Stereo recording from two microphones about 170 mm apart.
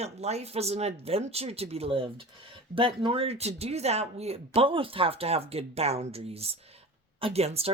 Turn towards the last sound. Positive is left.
turn(degrees=-35)  # may be behind; listen again after turning